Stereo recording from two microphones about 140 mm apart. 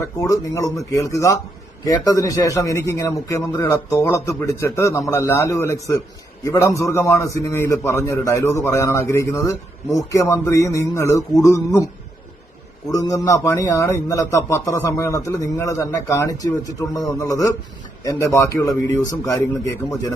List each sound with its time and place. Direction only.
0.0 s a man's voice: 20° left (ahead or behind)
12.9 s a man's voice: 25° left (ahead or behind)